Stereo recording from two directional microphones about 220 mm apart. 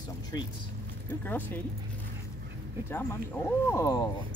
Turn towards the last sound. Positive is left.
turn(degrees=15)  # may be behind; listen again after turning